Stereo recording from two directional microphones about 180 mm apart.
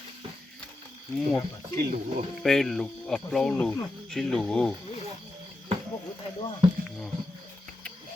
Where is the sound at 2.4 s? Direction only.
Centre (ahead or behind).